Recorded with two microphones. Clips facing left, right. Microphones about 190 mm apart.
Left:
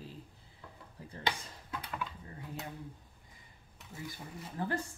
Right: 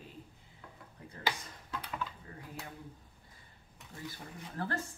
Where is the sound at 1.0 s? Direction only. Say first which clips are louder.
Left 2 dB; 30° left (ahead or behind).